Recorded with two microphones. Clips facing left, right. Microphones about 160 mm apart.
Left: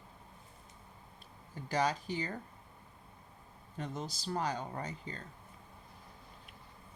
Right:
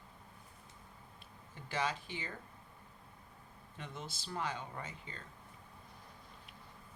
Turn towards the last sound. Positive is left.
turn(degrees=40)  # may be behind; listen again after turning